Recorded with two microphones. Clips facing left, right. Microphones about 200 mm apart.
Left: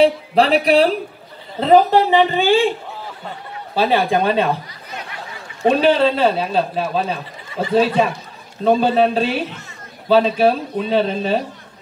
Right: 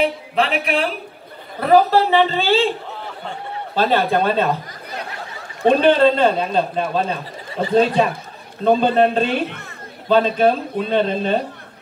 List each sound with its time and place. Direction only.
0.0 s speech: 35° left (ahead or behind)
1.6 s speech: 20° left (ahead or behind)
3.7 s speech: 10° left (ahead or behind)
5.7 s a man's voice: 5° left (ahead or behind)